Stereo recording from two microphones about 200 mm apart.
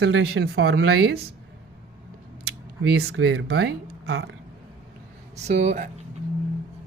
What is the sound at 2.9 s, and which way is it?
Speech, 70° right (ahead or behind).